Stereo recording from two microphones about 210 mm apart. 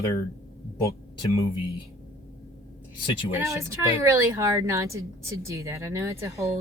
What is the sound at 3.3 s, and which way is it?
Speech, 15° right (ahead or behind).